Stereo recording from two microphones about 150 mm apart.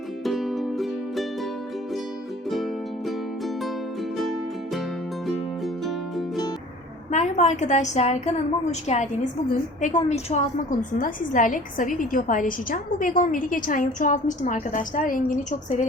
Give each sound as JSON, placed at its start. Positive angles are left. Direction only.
{"t": 0.3, "sound": "music", "side_deg": 0}
{"t": 2.5, "sound": "music", "side_deg": 0}
{"t": 5.2, "sound": "music", "side_deg": 0}
{"t": 7.1, "sound": "a woman's voice", "side_deg": 50}
{"t": 11.0, "sound": "a woman's voice", "side_deg": 60}